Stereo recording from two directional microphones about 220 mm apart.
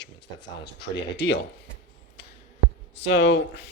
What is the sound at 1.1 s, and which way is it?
Speech, 55° left (ahead or behind).